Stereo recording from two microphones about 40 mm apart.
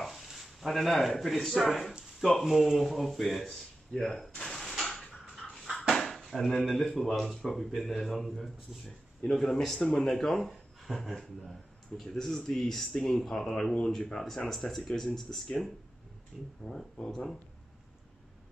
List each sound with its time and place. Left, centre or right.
0.0 s a man's voice: centre
4.5 s a sound: centre
4.8 s creak: centre
5.3 s a sound: centre
8.0 s a man's voice: centre
9.8 s a man's voice: centre
16.6 s speech: centre